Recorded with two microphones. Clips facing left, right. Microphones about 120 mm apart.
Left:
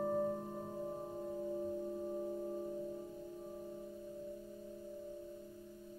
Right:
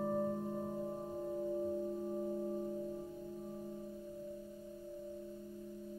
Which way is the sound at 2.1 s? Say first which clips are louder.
Right 2 dB; 5° right (ahead or behind).